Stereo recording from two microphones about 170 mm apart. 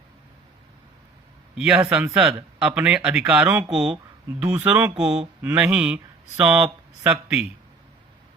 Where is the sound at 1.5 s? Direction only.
5° right (ahead or behind).